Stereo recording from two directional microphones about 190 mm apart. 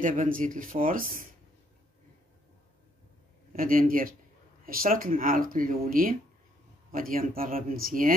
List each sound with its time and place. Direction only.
0.4 s speech: 45° right (ahead or behind)
3.5 s speech: 45° right (ahead or behind)